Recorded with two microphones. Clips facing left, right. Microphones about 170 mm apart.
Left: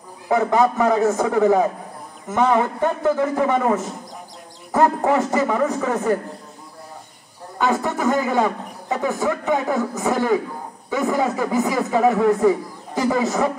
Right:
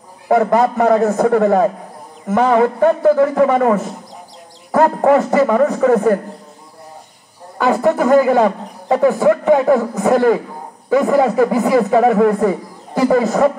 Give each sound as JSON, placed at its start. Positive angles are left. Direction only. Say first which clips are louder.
{"t": 0.3, "sound": "a man's voice", "louder": "right 4 dB", "side_deg": -60}
{"t": 7.8, "sound": "a man's voice", "louder": "right 9 dB", "side_deg": -55}